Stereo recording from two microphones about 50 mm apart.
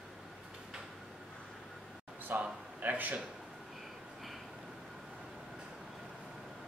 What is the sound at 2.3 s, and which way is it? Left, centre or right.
Speech, right.